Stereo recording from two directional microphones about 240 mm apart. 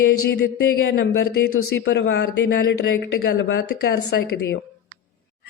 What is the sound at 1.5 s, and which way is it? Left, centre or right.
A woman's voice, left.